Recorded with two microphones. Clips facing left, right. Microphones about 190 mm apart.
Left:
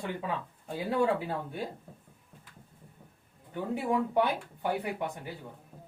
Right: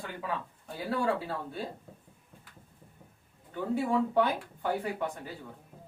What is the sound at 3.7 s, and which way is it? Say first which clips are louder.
Speech: right 1 dB; 15° left (ahead or behind).